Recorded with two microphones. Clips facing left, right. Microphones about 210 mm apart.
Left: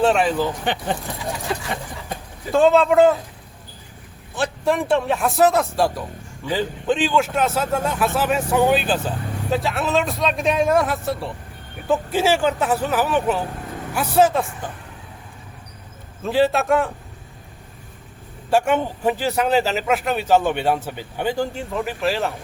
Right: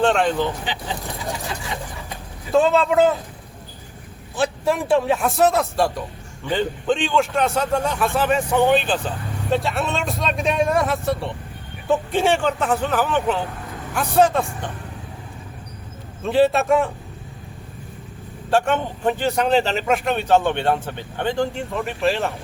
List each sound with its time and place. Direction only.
0.0 s speech: 5° left (ahead or behind)
0.6 s speech: 55° left (ahead or behind)
2.5 s speech: centre (ahead or behind)
4.4 s speech: centre (ahead or behind)
16.2 s speech: centre (ahead or behind)
18.5 s speech: 10° left (ahead or behind)